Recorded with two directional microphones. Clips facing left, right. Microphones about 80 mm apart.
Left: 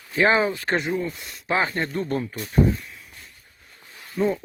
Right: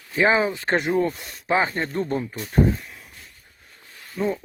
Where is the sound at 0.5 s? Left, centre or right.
Right.